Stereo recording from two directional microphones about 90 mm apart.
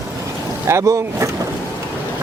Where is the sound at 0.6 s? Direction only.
35° right (ahead or behind).